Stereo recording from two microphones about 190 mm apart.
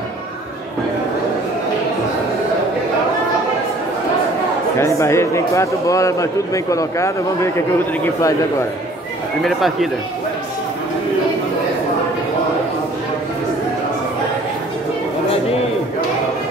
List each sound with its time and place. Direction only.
4.7 s a man's voice: 15° left (ahead or behind)
9.4 s speech: centre (ahead or behind)